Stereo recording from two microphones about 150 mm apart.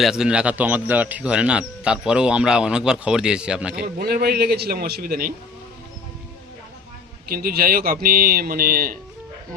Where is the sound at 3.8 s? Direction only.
90° right.